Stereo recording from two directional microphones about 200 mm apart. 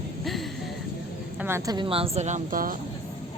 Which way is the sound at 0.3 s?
Centre (ahead or behind).